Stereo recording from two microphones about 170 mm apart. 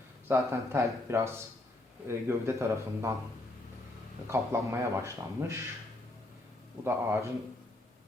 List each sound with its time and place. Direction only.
0.3 s speech: 15° right (ahead or behind)
4.3 s speech: 15° right (ahead or behind)
6.8 s speech: 15° right (ahead or behind)